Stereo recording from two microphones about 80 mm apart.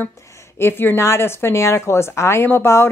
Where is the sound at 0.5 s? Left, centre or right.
Left.